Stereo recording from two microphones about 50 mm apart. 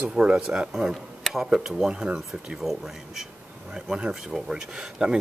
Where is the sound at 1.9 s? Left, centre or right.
Right.